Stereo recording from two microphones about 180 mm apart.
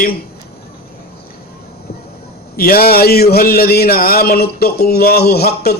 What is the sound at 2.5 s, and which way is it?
A man's voice, 55° left (ahead or behind).